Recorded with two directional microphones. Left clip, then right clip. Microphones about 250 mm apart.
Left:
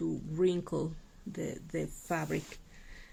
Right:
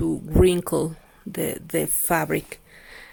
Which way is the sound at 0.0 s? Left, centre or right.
Right.